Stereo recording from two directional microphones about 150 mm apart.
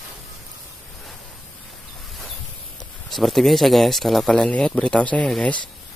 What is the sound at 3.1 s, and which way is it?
Speech, centre (ahead or behind).